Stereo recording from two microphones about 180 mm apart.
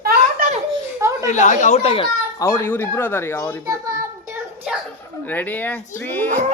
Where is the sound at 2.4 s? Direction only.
15° left (ahead or behind).